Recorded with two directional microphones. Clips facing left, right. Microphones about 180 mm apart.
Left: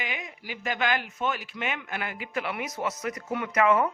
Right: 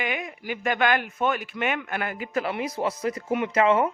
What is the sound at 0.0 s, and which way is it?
A man's voice, 55° right (ahead or behind).